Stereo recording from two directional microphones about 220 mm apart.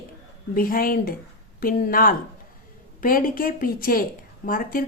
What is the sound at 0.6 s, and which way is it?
Speech, 40° left (ahead or behind).